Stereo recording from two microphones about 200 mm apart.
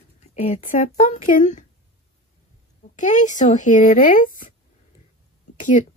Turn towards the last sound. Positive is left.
turn(degrees=40)  # may be behind; listen again after turning